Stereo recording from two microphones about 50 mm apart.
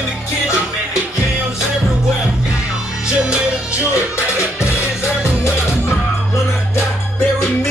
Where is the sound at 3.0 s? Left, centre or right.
Centre.